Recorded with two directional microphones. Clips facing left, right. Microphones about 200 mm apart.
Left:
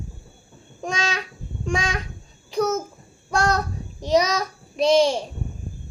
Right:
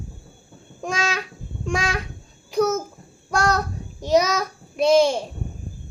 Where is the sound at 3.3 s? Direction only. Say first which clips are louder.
Even; 30° left (ahead or behind).